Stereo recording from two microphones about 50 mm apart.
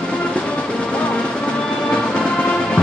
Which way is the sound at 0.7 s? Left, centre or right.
Left.